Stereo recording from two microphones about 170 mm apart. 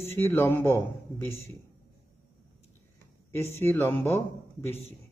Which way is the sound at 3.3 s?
10° left (ahead or behind).